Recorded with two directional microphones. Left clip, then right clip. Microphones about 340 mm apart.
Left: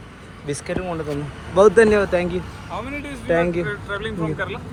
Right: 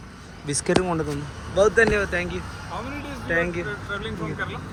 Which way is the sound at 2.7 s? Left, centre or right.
Left.